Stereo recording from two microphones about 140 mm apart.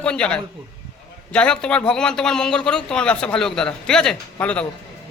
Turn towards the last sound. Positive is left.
turn(degrees=10)  # may be behind; listen again after turning